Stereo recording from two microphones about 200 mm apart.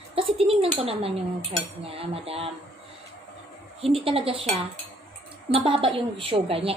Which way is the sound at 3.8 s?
30° right (ahead or behind).